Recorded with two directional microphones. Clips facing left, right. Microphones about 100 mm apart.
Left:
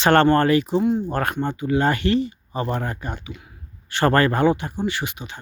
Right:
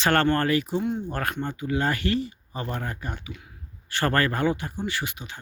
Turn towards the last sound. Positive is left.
turn(degrees=20)  # may be behind; listen again after turning